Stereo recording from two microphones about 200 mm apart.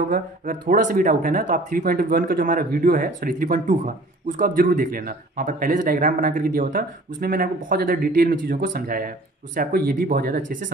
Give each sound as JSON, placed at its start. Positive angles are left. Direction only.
{"t": 0.1, "sound": "speech", "side_deg": -40}